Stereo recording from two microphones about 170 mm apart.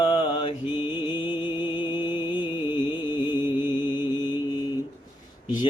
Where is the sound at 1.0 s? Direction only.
25° left (ahead or behind).